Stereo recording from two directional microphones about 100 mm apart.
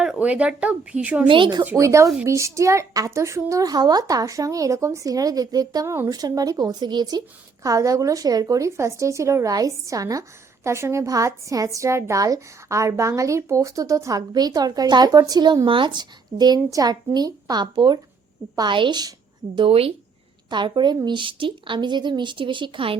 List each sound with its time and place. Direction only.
0.0 s speech: 10° right (ahead or behind)
1.3 s a woman's voice: 50° right (ahead or behind)
1.7 s a woman's voice: 30° right (ahead or behind)
7.6 s a woman's voice: 35° right (ahead or behind)
19.5 s a woman's voice: 70° right (ahead or behind)
20.5 s a woman's voice: 50° right (ahead or behind)